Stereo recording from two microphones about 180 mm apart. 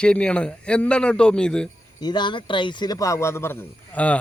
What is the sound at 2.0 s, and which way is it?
A man's voice, 25° left (ahead or behind).